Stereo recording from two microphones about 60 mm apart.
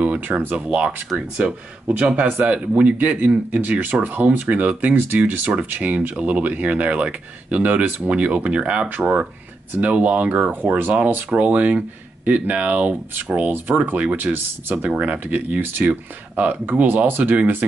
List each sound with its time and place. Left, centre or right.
0.0 s speech: right
2.2 s speech: right
2.5 s speech: right